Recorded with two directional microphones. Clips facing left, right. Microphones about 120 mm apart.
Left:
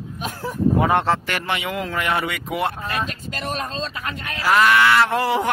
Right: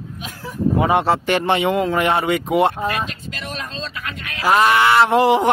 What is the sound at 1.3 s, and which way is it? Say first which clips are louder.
Speech: right 8 dB; 25° right (ahead or behind).